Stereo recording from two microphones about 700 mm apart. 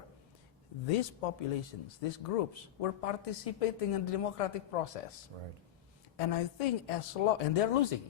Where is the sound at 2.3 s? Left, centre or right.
Left.